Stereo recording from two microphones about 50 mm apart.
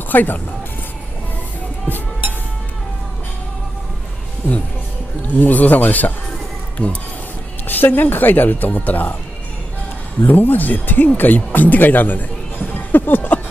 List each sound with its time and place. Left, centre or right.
0.1 s speech: left
5.2 s speech: left
7.6 s speech: left
10.2 s speech: left
12.7 s a sound: left